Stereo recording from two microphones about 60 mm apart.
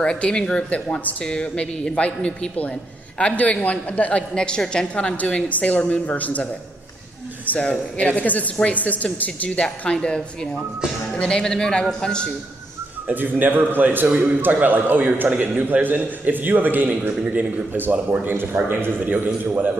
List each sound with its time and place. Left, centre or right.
0.0 s a woman's voice: centre
13.0 s a man's voice: right